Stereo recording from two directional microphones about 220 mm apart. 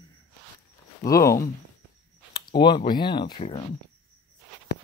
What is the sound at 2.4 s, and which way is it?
Speech, 20° left (ahead or behind).